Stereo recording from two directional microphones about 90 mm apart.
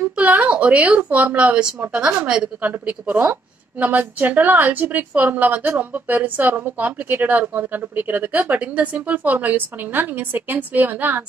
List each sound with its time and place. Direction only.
0.2 s a woman's voice: 15° right (ahead or behind)